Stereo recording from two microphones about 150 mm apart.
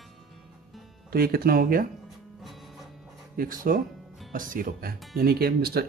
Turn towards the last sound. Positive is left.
turn(degrees=-90)